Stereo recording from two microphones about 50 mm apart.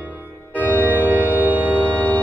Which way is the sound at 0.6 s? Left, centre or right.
Left.